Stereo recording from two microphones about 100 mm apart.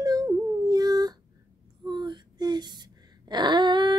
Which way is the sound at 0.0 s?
40° right (ahead or behind).